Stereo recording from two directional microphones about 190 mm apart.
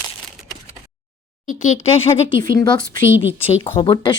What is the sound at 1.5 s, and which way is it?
Speech, 40° left (ahead or behind).